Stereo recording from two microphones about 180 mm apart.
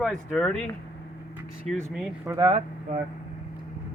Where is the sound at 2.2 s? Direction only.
20° right (ahead or behind).